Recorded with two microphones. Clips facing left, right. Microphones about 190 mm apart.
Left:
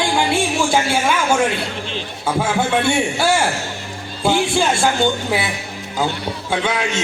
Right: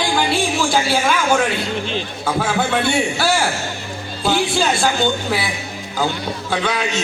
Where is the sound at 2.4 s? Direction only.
25° left (ahead or behind).